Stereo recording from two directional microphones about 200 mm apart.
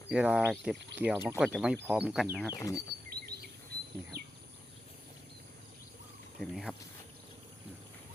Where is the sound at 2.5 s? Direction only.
15° left (ahead or behind).